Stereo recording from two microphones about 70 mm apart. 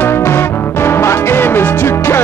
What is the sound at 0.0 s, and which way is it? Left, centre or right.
Music, left.